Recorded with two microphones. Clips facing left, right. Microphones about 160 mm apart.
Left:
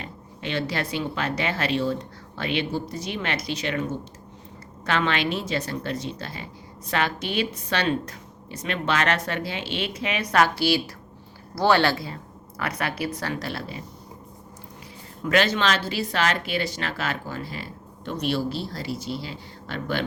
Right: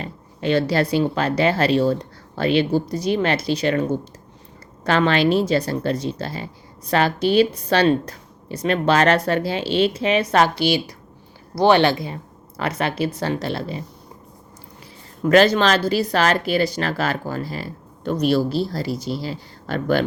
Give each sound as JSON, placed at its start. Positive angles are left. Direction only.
{"t": 0.0, "sound": "a woman's voice", "side_deg": -40}
{"t": 15.2, "sound": "speech", "side_deg": -40}